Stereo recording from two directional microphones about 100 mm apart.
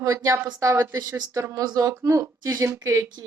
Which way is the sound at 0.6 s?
25° right (ahead or behind).